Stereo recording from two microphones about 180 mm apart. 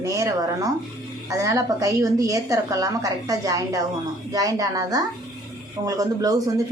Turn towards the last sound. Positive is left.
turn(degrees=-20)  # may be behind; listen again after turning